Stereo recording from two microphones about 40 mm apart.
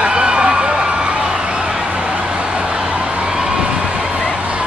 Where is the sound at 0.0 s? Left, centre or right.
Right.